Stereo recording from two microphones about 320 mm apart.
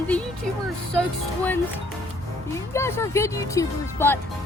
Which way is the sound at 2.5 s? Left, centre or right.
Centre.